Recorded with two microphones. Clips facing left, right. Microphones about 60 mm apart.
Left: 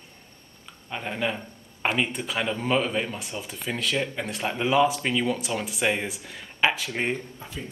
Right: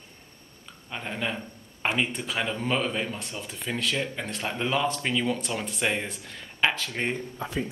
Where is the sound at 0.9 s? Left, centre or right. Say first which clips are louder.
Left 3 dB; centre.